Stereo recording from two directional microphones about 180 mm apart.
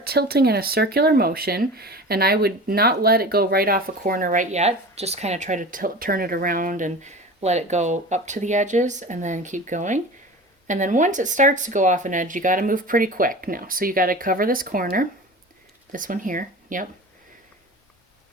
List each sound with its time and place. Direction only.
0.0 s speech: 60° right (ahead or behind)